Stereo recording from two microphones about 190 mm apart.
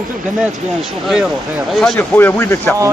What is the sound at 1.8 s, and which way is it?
Speech, 5° left (ahead or behind).